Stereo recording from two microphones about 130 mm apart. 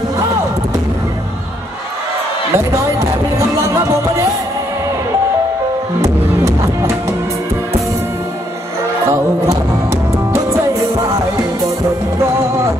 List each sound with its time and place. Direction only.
2.5 s music: 20° right (ahead or behind)
5.9 s music: 20° right (ahead or behind)
9.0 s music: 20° right (ahead or behind)
12.2 s music: 20° right (ahead or behind)